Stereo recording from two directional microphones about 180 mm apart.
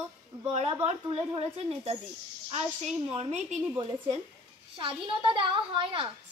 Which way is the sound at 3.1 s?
35° right (ahead or behind).